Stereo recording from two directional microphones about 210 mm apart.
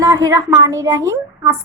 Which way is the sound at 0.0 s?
15° right (ahead or behind).